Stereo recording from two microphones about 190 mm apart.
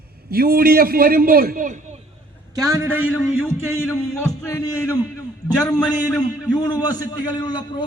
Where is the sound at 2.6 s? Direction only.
15° right (ahead or behind).